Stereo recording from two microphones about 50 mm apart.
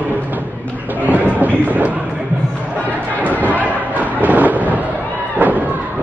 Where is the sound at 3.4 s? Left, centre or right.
Right.